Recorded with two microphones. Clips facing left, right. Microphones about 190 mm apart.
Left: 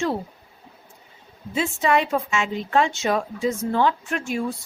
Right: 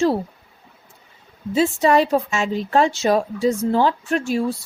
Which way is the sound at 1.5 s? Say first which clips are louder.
Right 5 dB; 35° right (ahead or behind).